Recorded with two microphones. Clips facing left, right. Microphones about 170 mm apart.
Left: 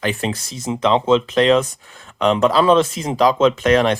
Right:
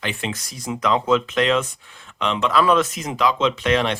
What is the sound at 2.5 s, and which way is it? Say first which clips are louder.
Speech: left 4 dB; 30° left (ahead or behind).